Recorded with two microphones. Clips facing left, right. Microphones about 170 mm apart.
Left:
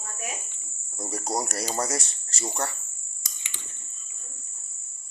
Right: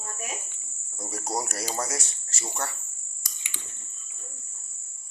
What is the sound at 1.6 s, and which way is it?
Speech, 5° right (ahead or behind).